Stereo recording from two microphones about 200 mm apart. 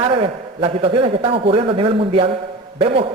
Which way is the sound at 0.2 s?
30° right (ahead or behind).